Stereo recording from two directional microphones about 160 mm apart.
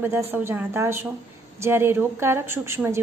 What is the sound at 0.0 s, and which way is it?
A woman's voice, 15° right (ahead or behind).